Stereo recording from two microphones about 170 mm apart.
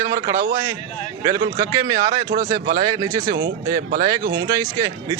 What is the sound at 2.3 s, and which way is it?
Speech, 55° right (ahead or behind).